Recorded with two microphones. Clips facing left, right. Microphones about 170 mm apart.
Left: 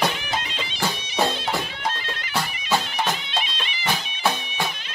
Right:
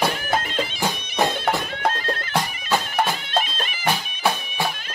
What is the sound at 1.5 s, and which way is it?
Music, 55° right (ahead or behind).